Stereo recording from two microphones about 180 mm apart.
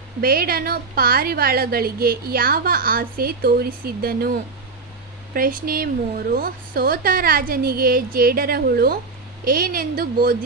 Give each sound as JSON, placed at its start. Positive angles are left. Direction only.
{"t": 0.2, "sound": "a woman's voice", "side_deg": -55}